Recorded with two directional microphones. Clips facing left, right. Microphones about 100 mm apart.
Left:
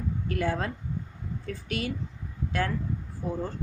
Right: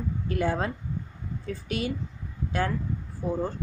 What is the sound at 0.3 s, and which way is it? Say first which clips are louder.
Speech: right 2 dB; 20° right (ahead or behind).